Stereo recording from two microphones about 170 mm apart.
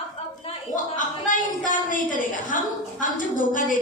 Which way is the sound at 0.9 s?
50° left (ahead or behind).